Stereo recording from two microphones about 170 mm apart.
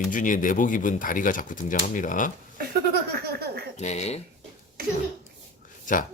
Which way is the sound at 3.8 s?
40° left (ahead or behind).